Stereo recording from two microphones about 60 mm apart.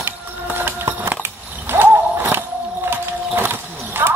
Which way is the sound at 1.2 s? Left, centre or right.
Right.